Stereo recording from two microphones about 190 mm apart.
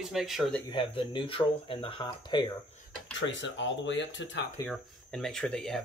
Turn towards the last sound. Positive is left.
turn(degrees=5)  # may be behind; listen again after turning